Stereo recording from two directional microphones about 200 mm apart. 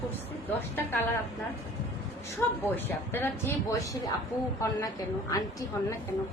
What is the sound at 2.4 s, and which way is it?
A man's voice, 10° left (ahead or behind).